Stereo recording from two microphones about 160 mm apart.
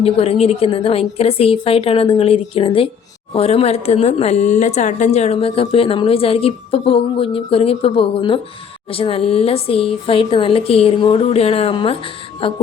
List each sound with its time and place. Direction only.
0.0 s a woman's voice: 40° left (ahead or behind)